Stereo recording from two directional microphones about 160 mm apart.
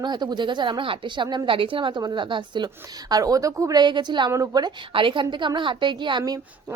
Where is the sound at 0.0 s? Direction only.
25° right (ahead or behind).